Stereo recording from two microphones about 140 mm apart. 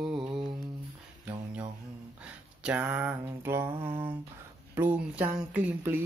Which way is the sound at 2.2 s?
10° right (ahead or behind).